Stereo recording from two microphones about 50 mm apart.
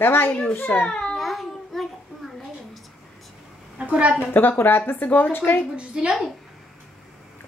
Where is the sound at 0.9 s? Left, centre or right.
Centre.